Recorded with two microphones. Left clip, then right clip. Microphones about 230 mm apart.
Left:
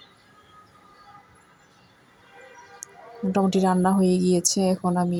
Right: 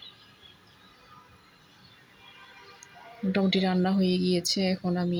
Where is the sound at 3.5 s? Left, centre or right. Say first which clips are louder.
Left 6 dB; centre.